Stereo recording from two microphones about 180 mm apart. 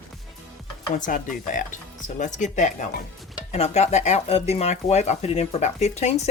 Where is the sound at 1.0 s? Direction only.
45° left (ahead or behind).